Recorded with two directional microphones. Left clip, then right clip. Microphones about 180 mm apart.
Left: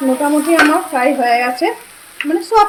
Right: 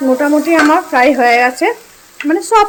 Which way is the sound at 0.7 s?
30° right (ahead or behind).